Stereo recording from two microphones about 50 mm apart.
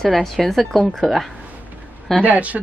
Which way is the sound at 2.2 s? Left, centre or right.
Right.